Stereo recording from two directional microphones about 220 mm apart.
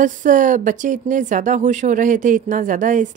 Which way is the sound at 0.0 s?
35° right (ahead or behind).